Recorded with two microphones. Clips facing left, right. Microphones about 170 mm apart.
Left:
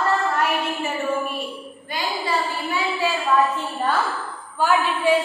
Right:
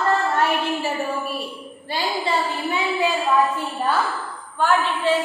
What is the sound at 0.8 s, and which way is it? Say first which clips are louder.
A woman's voice: left 1 dB; 35° right (ahead or behind).